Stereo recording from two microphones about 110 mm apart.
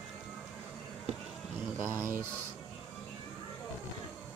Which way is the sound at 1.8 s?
25° right (ahead or behind).